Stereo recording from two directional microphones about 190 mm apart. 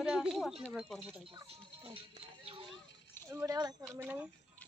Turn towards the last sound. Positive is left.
turn(degrees=-10)  # may be behind; listen again after turning